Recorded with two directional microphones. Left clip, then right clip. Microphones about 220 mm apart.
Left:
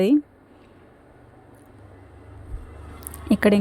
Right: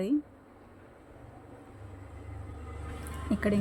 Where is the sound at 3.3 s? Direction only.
40° left (ahead or behind).